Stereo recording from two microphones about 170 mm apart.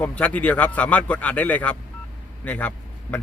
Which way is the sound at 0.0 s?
10° left (ahead or behind).